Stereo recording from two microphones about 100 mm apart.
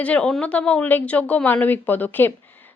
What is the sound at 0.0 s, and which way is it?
Speech, 10° left (ahead or behind).